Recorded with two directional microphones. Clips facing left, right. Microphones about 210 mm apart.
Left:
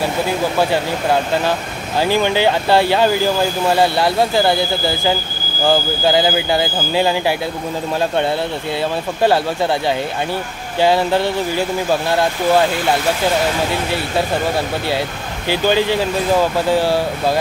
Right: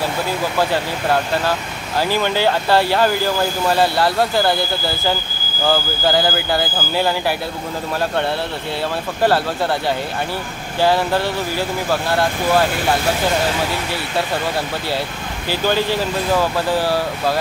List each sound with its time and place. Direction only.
2.0 s speech: 15° left (ahead or behind)
5.7 s speech: 15° left (ahead or behind)
15.4 s speech: 20° left (ahead or behind)